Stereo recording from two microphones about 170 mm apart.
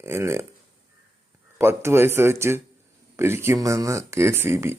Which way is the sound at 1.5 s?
15° right (ahead or behind).